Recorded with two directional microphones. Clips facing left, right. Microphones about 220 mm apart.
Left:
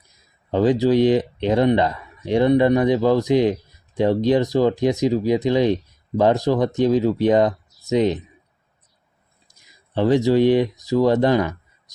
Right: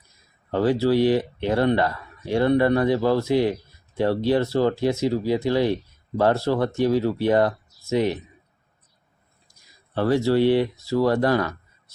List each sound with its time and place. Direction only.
0.5 s speech: 20° left (ahead or behind)
9.5 s speech: 20° left (ahead or behind)